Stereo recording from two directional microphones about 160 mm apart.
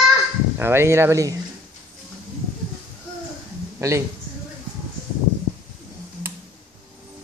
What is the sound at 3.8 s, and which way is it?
Speech, 20° right (ahead or behind).